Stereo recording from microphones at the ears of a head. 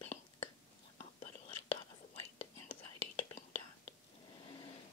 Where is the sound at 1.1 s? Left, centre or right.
Left.